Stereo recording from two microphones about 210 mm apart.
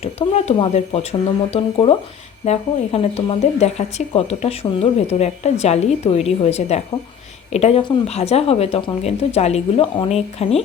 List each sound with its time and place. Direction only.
0.0 s speech: 30° left (ahead or behind)